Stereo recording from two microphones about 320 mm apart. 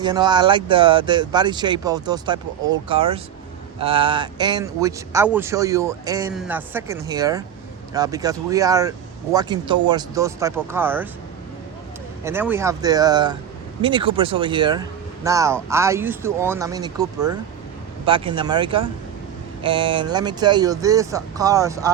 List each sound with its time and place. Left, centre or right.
0.0 s speech: centre
12.2 s speech: centre